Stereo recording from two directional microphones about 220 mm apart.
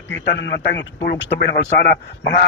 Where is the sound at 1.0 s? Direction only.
35° left (ahead or behind).